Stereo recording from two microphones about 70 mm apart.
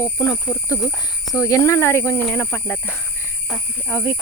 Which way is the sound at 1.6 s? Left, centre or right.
Left.